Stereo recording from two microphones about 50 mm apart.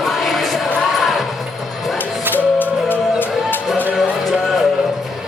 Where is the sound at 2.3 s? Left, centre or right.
Left.